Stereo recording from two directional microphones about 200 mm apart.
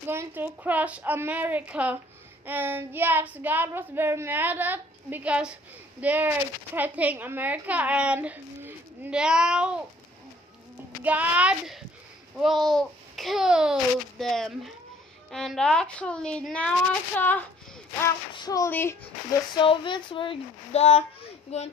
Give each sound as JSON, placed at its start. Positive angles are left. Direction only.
{"t": 0.1, "sound": "child singing", "side_deg": -10}
{"t": 11.1, "sound": "child singing", "side_deg": -5}
{"t": 12.4, "sound": "a child's voice", "side_deg": 0}
{"t": 17.2, "sound": "a sound", "side_deg": 10}
{"t": 18.3, "sound": "a sound", "side_deg": 20}
{"t": 19.5, "sound": "speech", "side_deg": 25}